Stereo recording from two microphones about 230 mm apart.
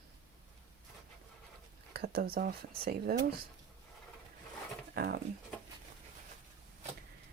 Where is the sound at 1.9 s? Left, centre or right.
Right.